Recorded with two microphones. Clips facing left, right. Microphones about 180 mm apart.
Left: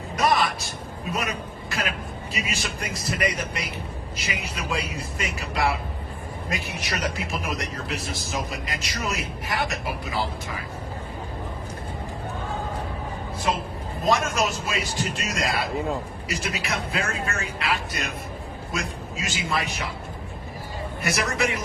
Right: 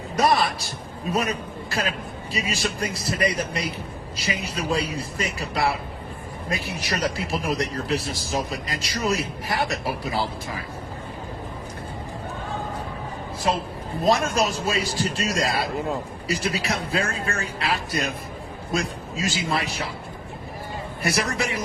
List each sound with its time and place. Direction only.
0.2 s a man's voice: 35° right (ahead or behind)
2.3 s a man's voice: 35° right (ahead or behind)
13.5 s a man's voice: 35° right (ahead or behind)
15.7 s a man's voice: centre (ahead or behind)
16.3 s a man's voice: 35° right (ahead or behind)
21.0 s a man's voice: 30° right (ahead or behind)